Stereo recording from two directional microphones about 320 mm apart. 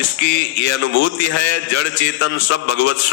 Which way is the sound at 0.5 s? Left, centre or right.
Left.